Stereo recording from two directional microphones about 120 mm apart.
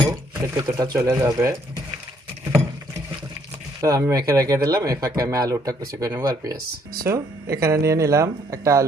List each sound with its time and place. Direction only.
0.0 s a sound: 30° right (ahead or behind)
1.0 s speech: 25° right (ahead or behind)
3.8 s speech: 30° right (ahead or behind)